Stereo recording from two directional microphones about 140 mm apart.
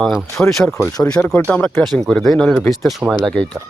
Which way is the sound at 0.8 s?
20° left (ahead or behind).